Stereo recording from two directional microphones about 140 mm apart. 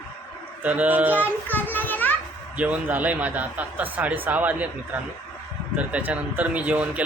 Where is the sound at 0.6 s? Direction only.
10° right (ahead or behind).